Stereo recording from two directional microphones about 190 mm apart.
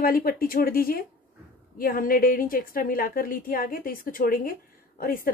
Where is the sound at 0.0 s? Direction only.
50° left (ahead or behind).